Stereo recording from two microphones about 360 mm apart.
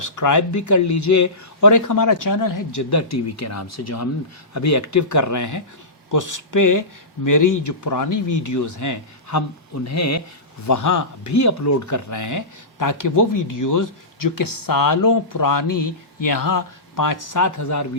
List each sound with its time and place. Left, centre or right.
0.0 s speech: left